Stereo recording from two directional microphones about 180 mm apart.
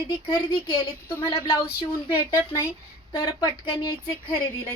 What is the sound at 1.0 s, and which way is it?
Speech, 15° left (ahead or behind).